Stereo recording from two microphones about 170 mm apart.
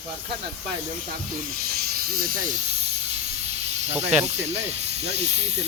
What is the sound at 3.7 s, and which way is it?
Snake, 40° right (ahead or behind).